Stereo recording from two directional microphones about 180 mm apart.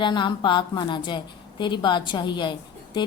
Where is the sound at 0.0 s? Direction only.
25° left (ahead or behind).